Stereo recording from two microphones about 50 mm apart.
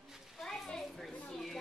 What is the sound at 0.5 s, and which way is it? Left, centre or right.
Children playing, centre.